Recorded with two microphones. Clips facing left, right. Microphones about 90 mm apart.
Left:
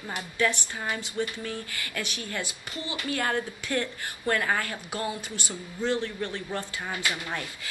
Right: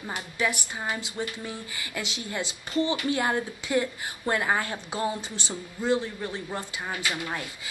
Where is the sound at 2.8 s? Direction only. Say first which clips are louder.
Right 8 dB; 30° right (ahead or behind).